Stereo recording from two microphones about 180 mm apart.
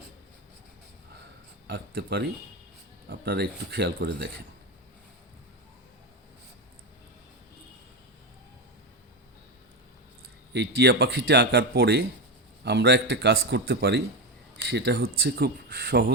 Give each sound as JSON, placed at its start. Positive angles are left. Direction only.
{"t": 1.6, "sound": "speech", "side_deg": -70}
{"t": 10.5, "sound": "a man's voice", "side_deg": -70}